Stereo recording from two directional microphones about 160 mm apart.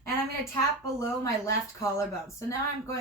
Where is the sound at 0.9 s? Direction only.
20° left (ahead or behind).